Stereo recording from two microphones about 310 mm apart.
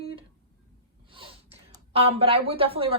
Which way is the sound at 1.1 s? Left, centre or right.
Centre.